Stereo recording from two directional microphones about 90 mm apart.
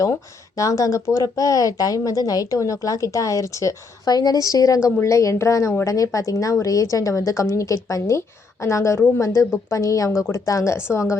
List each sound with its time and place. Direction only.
0.0 s speech: 40° left (ahead or behind)
10.9 s a woman's voice: 20° left (ahead or behind)